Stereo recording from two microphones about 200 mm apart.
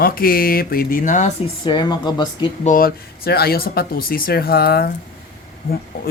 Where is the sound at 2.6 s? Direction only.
45° left (ahead or behind).